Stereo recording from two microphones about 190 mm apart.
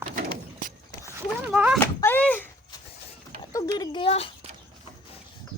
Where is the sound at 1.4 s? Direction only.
5° right (ahead or behind).